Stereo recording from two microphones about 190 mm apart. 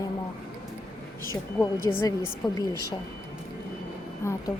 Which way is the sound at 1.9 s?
10° left (ahead or behind).